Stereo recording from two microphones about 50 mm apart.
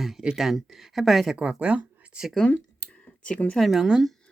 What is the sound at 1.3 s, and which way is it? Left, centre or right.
Speech, right.